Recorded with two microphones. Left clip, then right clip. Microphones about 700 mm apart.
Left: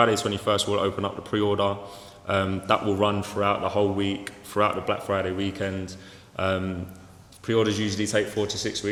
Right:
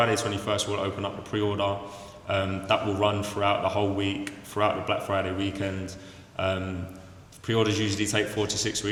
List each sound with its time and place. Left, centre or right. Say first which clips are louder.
0.0 s a man's voice: left 3 dB; left